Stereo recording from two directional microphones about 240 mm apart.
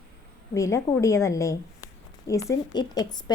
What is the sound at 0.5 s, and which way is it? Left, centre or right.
A woman's voice, centre.